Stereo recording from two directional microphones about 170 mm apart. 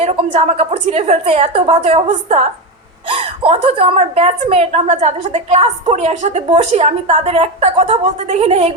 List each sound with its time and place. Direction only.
0.0 s a woman's voice: 40° right (ahead or behind)
1.4 s a woman's voice: 30° right (ahead or behind)